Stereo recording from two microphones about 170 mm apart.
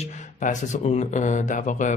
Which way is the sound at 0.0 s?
45° left (ahead or behind).